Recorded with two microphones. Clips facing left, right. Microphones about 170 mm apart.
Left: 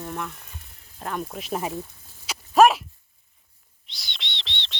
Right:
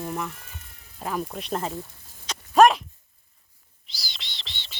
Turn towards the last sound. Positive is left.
turn(degrees=-5)  # may be behind; listen again after turning